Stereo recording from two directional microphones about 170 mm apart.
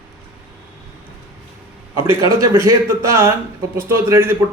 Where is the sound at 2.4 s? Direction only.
20° right (ahead or behind).